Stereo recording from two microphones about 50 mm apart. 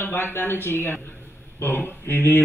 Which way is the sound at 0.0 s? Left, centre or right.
Left.